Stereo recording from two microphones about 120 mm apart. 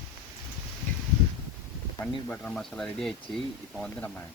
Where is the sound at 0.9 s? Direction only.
15° left (ahead or behind).